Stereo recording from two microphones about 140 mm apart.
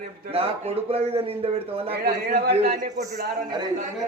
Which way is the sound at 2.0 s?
90° right.